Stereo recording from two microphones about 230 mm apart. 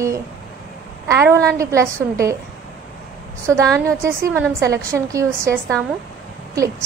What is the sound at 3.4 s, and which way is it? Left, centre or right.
A woman's voice, centre.